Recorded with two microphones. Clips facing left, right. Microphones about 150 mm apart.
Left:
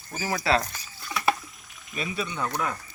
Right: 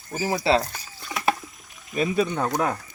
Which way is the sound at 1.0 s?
20° right (ahead or behind).